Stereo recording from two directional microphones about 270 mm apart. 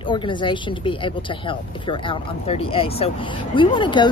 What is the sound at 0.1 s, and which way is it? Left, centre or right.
Speech, centre.